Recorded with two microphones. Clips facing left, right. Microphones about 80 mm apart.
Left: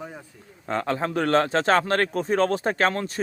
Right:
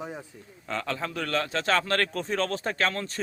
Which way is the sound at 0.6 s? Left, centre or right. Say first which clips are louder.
Left 6 dB; left.